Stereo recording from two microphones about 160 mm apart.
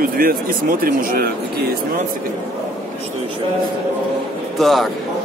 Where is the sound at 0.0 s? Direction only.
65° right (ahead or behind).